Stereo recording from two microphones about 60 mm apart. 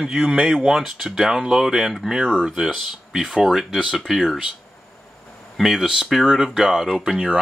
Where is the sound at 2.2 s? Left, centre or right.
Centre.